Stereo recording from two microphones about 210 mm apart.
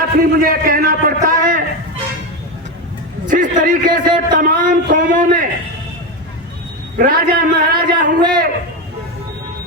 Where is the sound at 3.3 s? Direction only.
40° right (ahead or behind).